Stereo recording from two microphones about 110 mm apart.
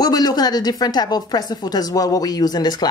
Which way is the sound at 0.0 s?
35° left (ahead or behind).